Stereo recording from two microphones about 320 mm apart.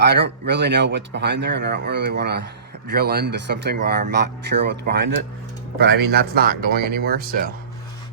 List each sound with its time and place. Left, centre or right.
0.0 s speech: right